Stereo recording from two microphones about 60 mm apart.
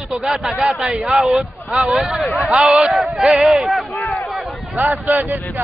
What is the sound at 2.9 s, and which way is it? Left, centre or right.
Speech, centre.